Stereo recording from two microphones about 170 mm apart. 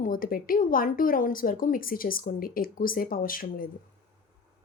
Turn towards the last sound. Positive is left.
turn(degrees=55)  # may be behind; listen again after turning